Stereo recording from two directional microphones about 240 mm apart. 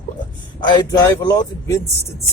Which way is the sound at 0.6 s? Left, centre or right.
Centre.